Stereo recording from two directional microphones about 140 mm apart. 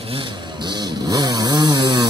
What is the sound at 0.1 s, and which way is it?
Chainsaw, 35° right (ahead or behind).